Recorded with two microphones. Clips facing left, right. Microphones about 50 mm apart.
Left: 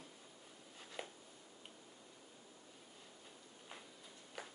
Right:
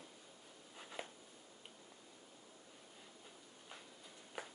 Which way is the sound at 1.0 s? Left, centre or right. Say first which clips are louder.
Even; centre.